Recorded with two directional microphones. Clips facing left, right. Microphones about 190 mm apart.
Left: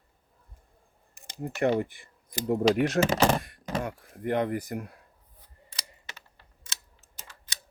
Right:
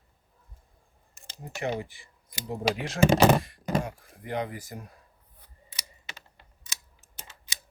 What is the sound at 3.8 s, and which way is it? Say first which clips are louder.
Speech: left 7 dB; 55° left (ahead or behind).